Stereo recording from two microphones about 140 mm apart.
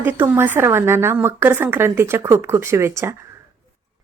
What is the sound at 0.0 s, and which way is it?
Speech, 15° right (ahead or behind).